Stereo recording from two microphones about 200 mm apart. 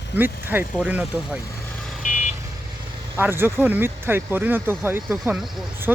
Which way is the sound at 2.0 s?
40° left (ahead or behind).